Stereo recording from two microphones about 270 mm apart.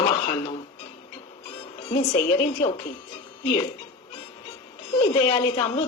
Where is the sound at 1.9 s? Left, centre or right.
Centre.